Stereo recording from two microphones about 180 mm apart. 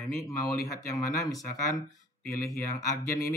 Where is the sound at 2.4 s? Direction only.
20° left (ahead or behind).